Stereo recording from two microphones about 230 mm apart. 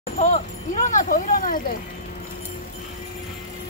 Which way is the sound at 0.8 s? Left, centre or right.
Left.